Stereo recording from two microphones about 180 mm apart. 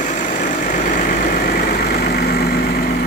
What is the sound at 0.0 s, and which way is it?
Vehicle, 45° left (ahead or behind).